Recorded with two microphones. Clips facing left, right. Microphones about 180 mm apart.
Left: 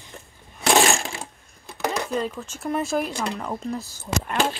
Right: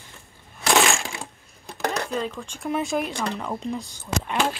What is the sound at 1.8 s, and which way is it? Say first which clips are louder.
Speech: left 1 dB; 5° left (ahead or behind).